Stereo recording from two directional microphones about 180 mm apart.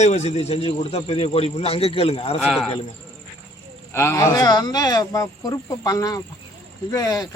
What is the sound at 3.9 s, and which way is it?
Speech, 15° left (ahead or behind).